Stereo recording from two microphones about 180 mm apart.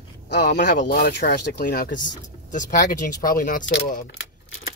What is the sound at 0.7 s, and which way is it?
Speech, 50° left (ahead or behind).